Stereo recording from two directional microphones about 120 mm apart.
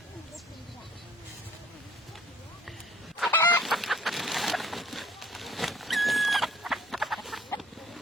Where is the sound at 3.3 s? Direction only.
15° left (ahead or behind).